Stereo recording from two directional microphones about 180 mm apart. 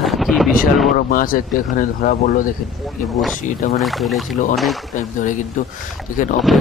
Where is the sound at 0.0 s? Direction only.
Centre (ahead or behind).